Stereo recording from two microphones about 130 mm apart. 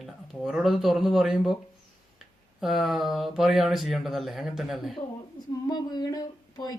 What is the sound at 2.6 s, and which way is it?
Speech, centre (ahead or behind).